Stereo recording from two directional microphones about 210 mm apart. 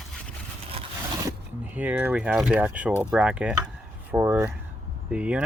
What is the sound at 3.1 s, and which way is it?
Cutlery, 5° right (ahead or behind).